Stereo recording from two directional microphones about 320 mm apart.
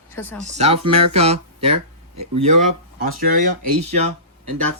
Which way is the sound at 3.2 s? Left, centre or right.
Right.